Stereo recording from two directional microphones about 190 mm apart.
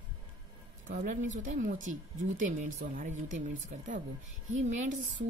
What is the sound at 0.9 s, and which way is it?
Speech, 40° right (ahead or behind).